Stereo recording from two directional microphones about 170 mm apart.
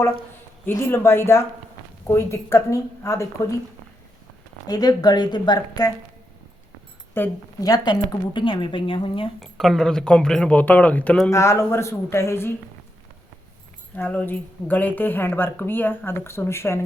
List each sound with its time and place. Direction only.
0.6 s a woman's voice: 15° left (ahead or behind)
4.6 s a woman's voice: 20° left (ahead or behind)
7.1 s a woman's voice: 15° left (ahead or behind)
9.4 s a woman's voice: centre (ahead or behind)
13.9 s a woman's voice: 10° left (ahead or behind)